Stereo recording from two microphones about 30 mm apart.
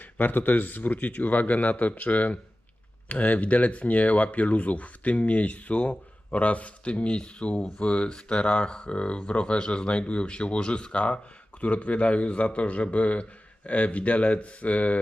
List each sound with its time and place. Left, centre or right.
0.0 s speech: left
7.2 s speech: left